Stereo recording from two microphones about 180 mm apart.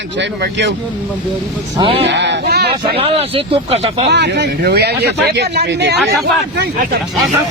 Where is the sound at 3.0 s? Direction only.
30° right (ahead or behind).